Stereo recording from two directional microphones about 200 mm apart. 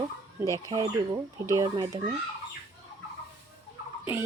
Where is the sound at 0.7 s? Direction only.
20° right (ahead or behind).